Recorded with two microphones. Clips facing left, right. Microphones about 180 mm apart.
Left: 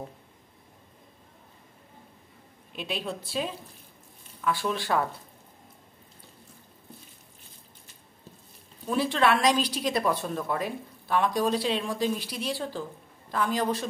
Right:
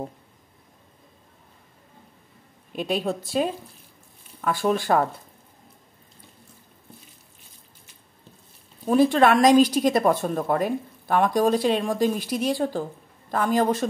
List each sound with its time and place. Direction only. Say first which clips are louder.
2.7 s a woman's voice: right 8 dB; 45° right (ahead or behind)
8.8 s a woman's voice: right 7 dB; 45° right (ahead or behind)